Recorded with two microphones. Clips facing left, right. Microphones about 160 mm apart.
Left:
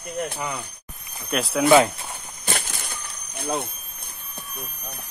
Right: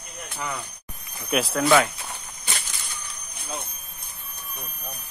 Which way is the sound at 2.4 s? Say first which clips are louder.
Left 7 dB; 55° left (ahead or behind).